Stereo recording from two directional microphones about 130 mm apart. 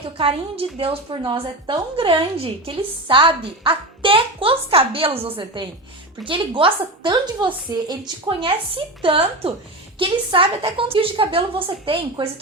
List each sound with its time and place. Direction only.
0.2 s a woman's voice: 45° right (ahead or behind)
1.2 s a woman's voice: 35° right (ahead or behind)
8.4 s a woman's voice: 45° right (ahead or behind)